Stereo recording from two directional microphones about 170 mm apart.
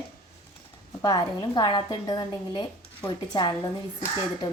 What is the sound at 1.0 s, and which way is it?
A woman's voice, 25° left (ahead or behind).